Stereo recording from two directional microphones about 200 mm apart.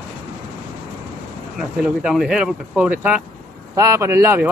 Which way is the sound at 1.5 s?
5° right (ahead or behind).